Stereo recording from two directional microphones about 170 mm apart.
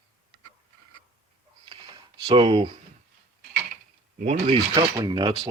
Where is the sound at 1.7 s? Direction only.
30° right (ahead or behind).